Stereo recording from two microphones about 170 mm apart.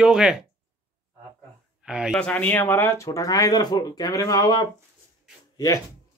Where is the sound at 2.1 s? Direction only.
10° left (ahead or behind); by 4.6 s 25° left (ahead or behind).